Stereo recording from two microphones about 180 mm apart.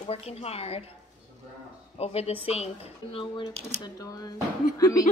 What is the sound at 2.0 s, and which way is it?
A woman's voice, 35° left (ahead or behind).